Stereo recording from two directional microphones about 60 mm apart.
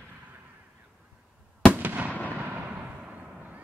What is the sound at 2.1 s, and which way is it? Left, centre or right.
Fireworks, left.